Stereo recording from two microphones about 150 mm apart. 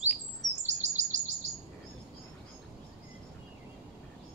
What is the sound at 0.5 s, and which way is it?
Chirp, 50° right (ahead or behind).